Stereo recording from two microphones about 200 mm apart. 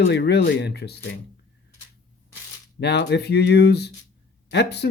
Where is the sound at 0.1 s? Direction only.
55° left (ahead or behind).